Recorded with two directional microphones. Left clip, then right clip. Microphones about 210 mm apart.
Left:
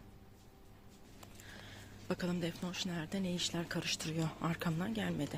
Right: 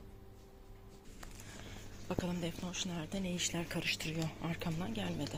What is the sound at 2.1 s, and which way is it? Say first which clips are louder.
Speech: left 1 dB; 20° left (ahead or behind).